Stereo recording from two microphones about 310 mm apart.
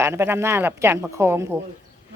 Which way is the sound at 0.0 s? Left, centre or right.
Centre.